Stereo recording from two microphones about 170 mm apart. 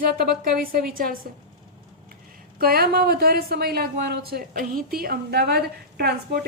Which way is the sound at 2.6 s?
65° right (ahead or behind).